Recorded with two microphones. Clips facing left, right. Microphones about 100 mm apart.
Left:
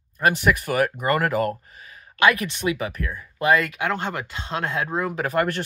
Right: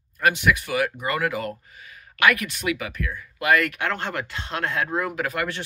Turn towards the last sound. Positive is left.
turn(degrees=30)  # may be behind; listen again after turning